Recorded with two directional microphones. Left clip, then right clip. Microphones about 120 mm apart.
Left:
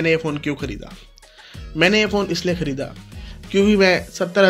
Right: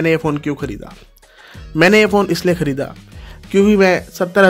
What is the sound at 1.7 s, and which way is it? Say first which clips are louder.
Speech: right 6 dB; 55° right (ahead or behind).